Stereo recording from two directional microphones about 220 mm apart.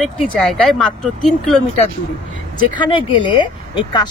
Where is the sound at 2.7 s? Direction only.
20° left (ahead or behind).